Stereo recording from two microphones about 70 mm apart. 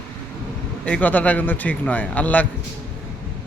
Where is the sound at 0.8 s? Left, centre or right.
Centre.